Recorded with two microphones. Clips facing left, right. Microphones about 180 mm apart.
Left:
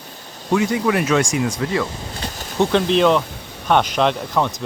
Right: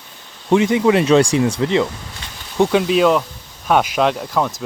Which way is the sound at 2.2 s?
40° left (ahead or behind).